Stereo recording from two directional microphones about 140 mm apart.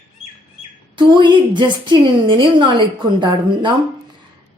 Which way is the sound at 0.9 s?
35° right (ahead or behind).